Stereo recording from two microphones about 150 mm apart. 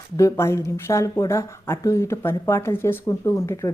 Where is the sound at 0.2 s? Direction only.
20° left (ahead or behind).